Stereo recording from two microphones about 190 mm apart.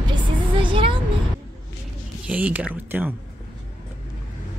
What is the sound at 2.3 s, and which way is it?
Speech, 5° right (ahead or behind).